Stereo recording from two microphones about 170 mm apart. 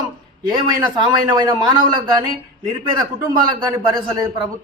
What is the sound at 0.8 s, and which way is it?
Speech, 25° right (ahead or behind).